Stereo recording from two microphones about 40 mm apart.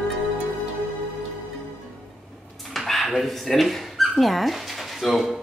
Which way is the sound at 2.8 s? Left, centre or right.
Centre.